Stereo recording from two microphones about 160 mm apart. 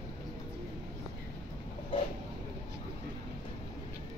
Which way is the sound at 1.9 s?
35° left (ahead or behind).